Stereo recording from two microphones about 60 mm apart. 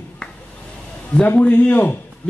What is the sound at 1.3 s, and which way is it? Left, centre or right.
Speech, left.